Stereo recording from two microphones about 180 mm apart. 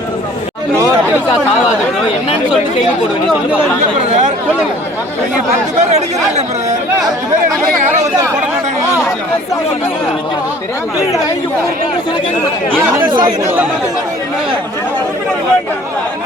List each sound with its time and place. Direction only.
5.8 s speech: 40° right (ahead or behind)
13.4 s speech: 10° right (ahead or behind)